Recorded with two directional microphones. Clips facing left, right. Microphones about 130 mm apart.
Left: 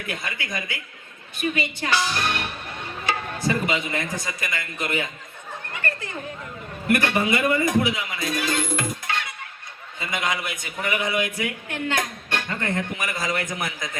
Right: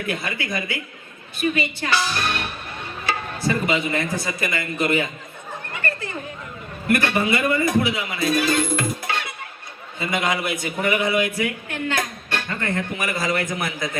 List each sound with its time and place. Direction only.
1.4 s a woman's voice: 15° left (ahead or behind)
3.1 s music: 15° left (ahead or behind)
3.7 s a man's voice: 30° right (ahead or behind)
6.9 s a woman's voice: 15° left (ahead or behind)
7.9 s a man's voice: 30° right (ahead or behind)
8.2 s a woman's voice: 15° left (ahead or behind)
9.0 s music: 10° right (ahead or behind)
10.0 s a man's voice: 30° right (ahead or behind)
11.2 s speech: 20° left (ahead or behind)
13.0 s a man's voice: 30° right (ahead or behind)
13.2 s a man's voice: 20° left (ahead or behind)